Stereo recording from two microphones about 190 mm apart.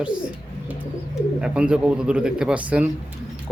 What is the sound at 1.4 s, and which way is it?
Speech, 5° right (ahead or behind).